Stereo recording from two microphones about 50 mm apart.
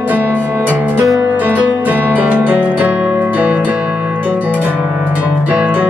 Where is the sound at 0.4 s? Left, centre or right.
Right.